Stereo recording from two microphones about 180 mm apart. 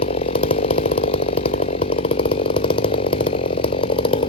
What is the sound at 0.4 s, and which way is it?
Chainsaw, 30° left (ahead or behind).